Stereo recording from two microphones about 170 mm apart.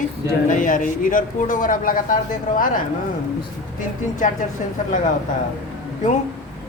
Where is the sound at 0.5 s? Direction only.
50° left (ahead or behind).